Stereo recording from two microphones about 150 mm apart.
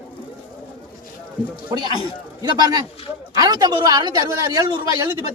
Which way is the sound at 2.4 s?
25° right (ahead or behind).